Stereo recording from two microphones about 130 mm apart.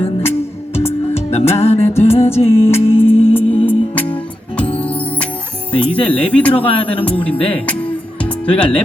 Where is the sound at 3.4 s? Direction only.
15° left (ahead or behind).